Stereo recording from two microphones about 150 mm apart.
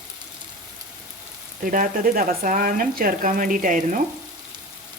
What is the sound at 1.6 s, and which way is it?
Speech, 65° right (ahead or behind).